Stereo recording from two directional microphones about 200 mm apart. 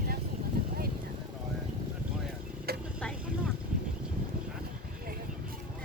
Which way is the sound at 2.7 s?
50° right (ahead or behind).